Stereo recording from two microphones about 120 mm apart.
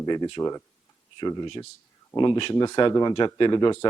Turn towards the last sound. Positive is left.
turn(degrees=40)  # may be behind; listen again after turning